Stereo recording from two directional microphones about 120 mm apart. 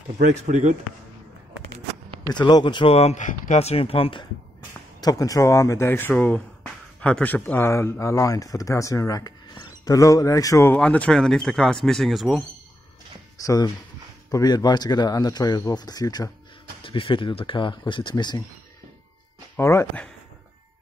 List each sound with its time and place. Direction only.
0.3 s speech: 75° right (ahead or behind)
2.2 s speech: 35° left (ahead or behind)
5.0 s speech: 30° left (ahead or behind)
10.8 s speech: 10° left (ahead or behind)
13.4 s speech: 30° left (ahead or behind)
16.8 s speech: 45° left (ahead or behind)
19.5 s speech: 20° left (ahead or behind)